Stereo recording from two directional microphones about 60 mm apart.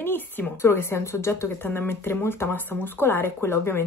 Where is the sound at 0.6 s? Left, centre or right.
Left.